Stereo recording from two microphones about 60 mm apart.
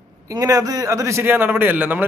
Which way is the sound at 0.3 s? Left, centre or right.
Right.